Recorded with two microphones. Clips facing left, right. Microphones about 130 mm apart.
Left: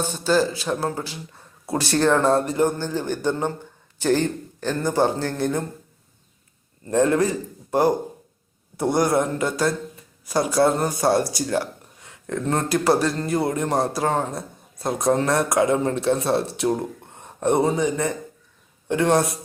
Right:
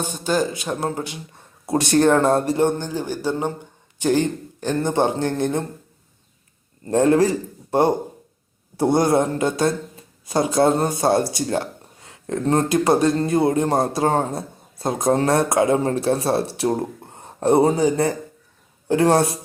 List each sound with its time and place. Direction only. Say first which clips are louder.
0.0 s a man's voice: left 1 dB; 15° right (ahead or behind)
2.8 s speech: left 1 dB; 10° right (ahead or behind)
6.9 s a man's voice: right 3 dB; 25° right (ahead or behind)